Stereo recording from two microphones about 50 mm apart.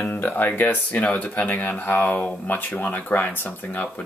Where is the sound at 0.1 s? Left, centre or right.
Left.